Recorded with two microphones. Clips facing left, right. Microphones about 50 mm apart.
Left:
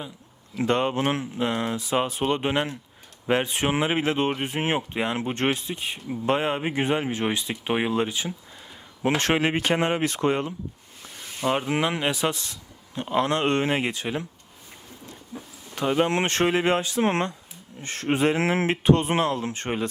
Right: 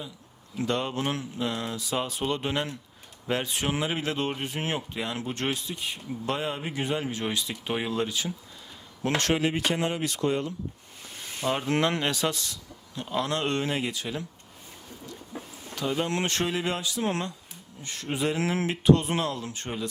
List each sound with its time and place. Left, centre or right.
0.6 s speech: left
9.3 s speech: left
11.3 s speech: centre
15.7 s speech: left